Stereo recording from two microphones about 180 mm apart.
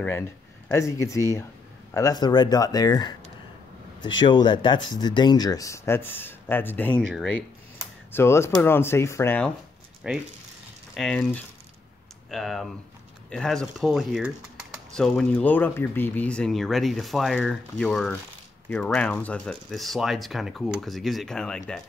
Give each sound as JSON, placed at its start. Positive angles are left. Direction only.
{"t": 0.7, "sound": "speech", "side_deg": 15}
{"t": 4.2, "sound": "speech", "side_deg": 25}
{"t": 10.1, "sound": "speech", "side_deg": -5}
{"t": 11.0, "sound": "speech", "side_deg": 5}